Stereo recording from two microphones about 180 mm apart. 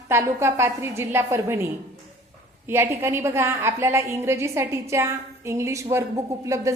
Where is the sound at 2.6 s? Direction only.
15° right (ahead or behind).